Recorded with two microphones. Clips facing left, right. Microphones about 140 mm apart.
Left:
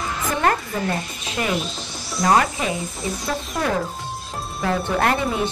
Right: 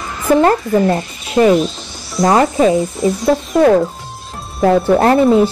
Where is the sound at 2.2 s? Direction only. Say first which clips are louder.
Right 8 dB; centre (ahead or behind).